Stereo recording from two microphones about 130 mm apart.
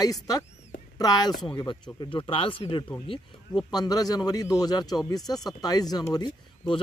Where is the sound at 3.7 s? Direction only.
30° left (ahead or behind).